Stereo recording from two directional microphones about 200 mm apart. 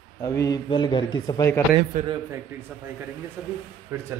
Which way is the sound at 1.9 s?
40° right (ahead or behind).